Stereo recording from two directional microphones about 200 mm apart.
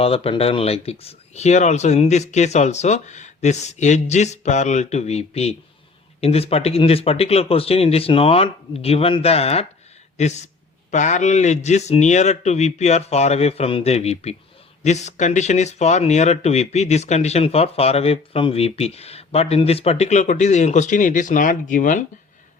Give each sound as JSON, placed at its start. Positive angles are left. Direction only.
{"t": 0.0, "sound": "speech", "side_deg": 30}